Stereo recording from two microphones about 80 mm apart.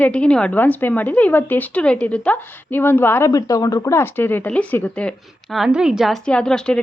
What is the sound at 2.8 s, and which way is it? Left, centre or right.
Speech, left.